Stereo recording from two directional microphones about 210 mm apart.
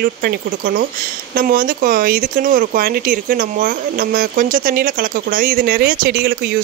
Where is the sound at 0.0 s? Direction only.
40° right (ahead or behind).